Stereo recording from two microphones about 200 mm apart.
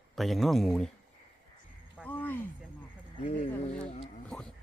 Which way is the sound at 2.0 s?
10° left (ahead or behind).